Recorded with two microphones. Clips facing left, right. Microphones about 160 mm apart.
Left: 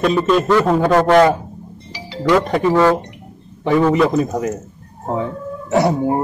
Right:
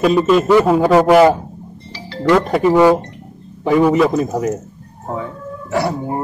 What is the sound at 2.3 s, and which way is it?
Speech, centre (ahead or behind).